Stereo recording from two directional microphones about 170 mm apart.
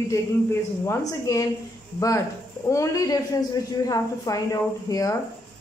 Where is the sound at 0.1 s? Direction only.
15° left (ahead or behind).